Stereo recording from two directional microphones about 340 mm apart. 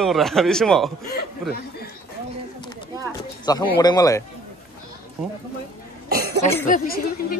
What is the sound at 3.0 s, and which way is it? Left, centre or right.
Speech, centre.